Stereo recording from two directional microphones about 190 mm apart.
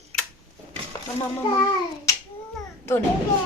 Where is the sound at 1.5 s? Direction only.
25° left (ahead or behind).